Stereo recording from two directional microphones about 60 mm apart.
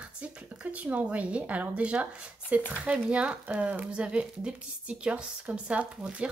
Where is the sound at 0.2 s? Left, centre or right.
Centre.